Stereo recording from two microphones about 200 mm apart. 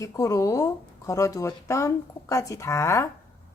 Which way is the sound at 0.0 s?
15° left (ahead or behind).